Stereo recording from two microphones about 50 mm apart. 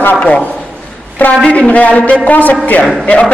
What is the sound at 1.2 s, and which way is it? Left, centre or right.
A man's voice, left.